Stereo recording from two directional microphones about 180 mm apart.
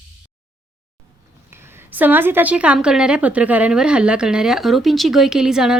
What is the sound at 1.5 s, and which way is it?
A woman's voice, 10° right (ahead or behind).